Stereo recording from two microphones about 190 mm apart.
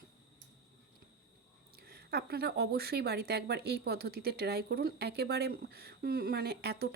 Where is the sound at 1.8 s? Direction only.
55° right (ahead or behind).